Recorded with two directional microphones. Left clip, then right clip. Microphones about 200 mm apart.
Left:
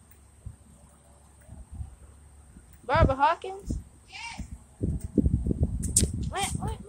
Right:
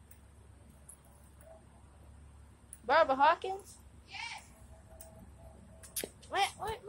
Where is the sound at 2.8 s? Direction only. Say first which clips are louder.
Left 3 dB; 5° right (ahead or behind).